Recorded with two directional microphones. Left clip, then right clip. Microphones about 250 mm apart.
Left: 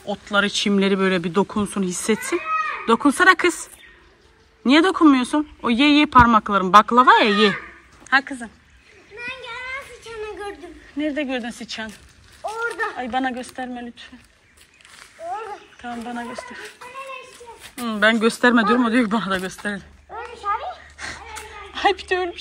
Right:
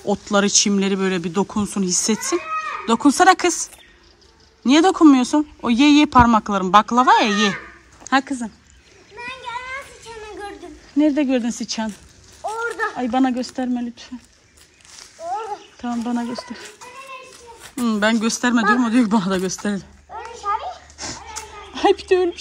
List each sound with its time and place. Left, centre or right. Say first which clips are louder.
0.1 s speech: right 3 dB; right
8.1 s speech: even; right
9.2 s children playing: right 2 dB; right
10.0 s a sound: left 2 dB; right
11.0 s speech: right 6 dB; right
12.4 s a sound: right 1 dB; right
12.9 s speech: right 4 dB; right
15.8 s speech: right 5 dB; right
17.7 s speech: left 1 dB; centre
20.3 s dog: right 1 dB; right
21.3 s a sound: right 1 dB; right